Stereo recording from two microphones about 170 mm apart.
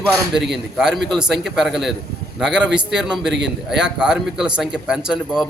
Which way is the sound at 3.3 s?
90° right.